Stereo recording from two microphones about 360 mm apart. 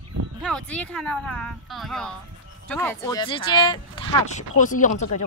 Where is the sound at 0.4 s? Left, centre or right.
Centre.